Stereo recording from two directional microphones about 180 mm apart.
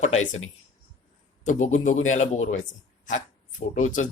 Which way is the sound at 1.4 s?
40° left (ahead or behind).